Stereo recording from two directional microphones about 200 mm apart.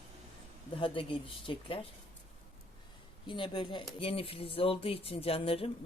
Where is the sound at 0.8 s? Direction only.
25° left (ahead or behind).